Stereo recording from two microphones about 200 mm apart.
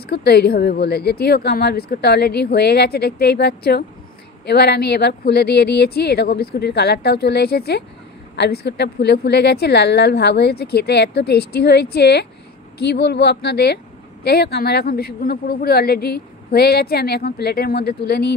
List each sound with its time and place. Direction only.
0.0 s a woman's voice: 55° left (ahead or behind)